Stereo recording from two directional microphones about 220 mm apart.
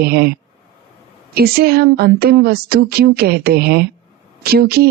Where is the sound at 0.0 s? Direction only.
45° right (ahead or behind).